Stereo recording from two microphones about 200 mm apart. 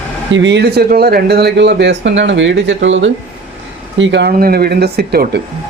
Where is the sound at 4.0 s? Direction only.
60° right (ahead or behind).